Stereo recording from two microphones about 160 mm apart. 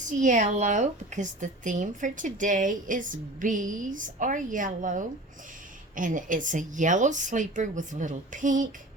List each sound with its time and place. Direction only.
0.0 s speech: 50° right (ahead or behind)